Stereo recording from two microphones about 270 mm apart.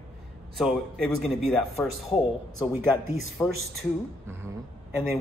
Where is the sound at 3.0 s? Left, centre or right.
Right.